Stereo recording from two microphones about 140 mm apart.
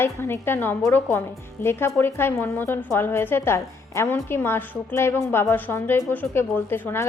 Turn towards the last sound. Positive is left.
turn(degrees=15)  # may be behind; listen again after turning